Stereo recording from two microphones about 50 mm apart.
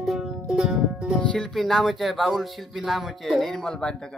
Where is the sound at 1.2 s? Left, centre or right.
Centre.